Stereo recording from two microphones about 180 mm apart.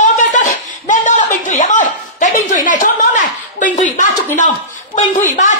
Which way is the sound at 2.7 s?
45° left (ahead or behind).